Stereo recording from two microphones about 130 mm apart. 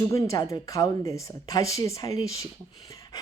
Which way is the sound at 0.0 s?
25° left (ahead or behind).